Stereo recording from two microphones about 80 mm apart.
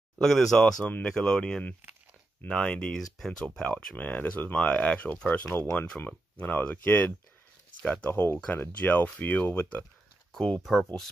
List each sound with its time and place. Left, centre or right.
0.2 s speech: centre
0.8 s speech: centre
8.1 s speech: left
10.6 s speech: centre